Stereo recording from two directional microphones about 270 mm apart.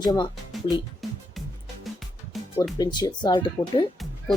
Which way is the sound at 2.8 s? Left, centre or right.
Centre.